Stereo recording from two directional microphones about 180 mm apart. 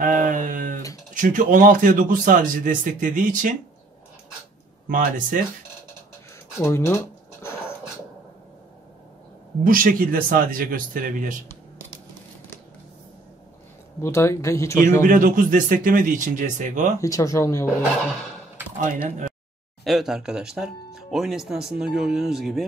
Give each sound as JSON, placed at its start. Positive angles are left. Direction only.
{"t": 0.0, "sound": "a sound", "side_deg": -45}
{"t": 1.1, "sound": "a man's voice", "side_deg": -45}
{"t": 4.8, "sound": "a man's voice", "side_deg": -50}
{"t": 6.6, "sound": "speech", "side_deg": 15}
{"t": 9.7, "sound": "a man's voice", "side_deg": -50}
{"t": 14.0, "sound": "speech", "side_deg": 15}
{"t": 15.0, "sound": "a man's voice", "side_deg": -50}
{"t": 17.0, "sound": "speech", "side_deg": 20}
{"t": 19.0, "sound": "a man's voice", "side_deg": -45}
{"t": 19.8, "sound": "speech", "side_deg": 0}